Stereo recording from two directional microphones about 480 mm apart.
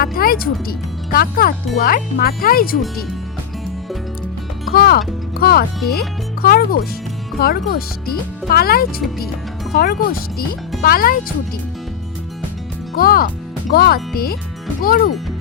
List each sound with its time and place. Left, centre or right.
0.0 s speech: centre
4.7 s speech: centre
13.0 s speech: centre